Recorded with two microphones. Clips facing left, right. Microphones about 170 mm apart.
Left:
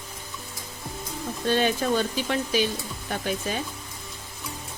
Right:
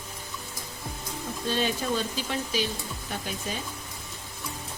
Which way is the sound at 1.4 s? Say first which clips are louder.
Left 5 dB; 60° left (ahead or behind).